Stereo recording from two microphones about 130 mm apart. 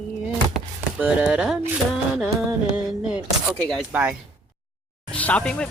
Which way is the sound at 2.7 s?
5° right (ahead or behind).